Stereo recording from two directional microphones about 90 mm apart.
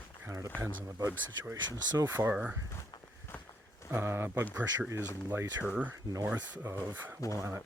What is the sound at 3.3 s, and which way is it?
Walk, 25° left (ahead or behind).